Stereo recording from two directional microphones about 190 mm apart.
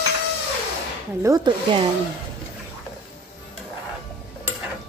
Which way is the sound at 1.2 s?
20° right (ahead or behind).